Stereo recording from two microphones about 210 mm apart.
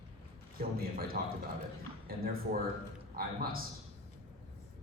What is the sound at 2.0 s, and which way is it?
A man's voice, 45° right (ahead or behind).